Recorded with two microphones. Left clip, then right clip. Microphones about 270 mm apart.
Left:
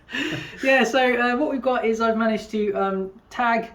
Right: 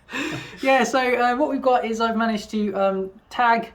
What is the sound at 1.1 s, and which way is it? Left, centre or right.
Speech, right.